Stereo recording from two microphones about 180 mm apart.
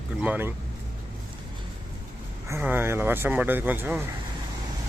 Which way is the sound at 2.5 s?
10° right (ahead or behind).